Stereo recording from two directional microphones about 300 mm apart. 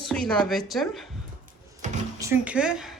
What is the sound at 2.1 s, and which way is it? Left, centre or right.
Speech, centre.